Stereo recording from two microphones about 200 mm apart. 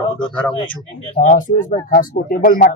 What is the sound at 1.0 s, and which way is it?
Speech, 40° left (ahead or behind).